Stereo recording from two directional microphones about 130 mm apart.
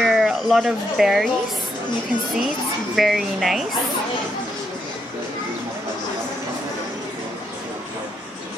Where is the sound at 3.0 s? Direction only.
Centre (ahead or behind).